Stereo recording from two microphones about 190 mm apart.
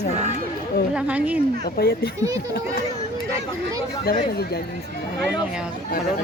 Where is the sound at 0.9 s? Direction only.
5° right (ahead or behind).